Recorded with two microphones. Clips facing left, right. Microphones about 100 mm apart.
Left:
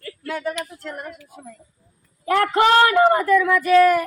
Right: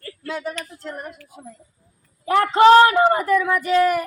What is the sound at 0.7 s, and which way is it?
Speech, 25° right (ahead or behind).